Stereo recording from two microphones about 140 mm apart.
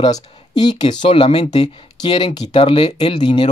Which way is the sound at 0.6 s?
35° left (ahead or behind).